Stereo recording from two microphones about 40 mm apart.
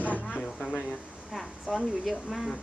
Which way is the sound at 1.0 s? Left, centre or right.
Right.